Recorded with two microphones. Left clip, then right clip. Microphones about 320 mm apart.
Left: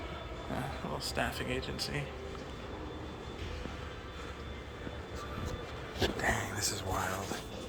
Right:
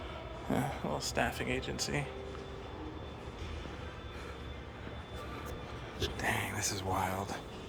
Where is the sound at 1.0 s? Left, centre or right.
Centre.